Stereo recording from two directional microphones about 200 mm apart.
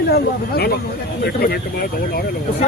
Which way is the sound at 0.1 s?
50° left (ahead or behind).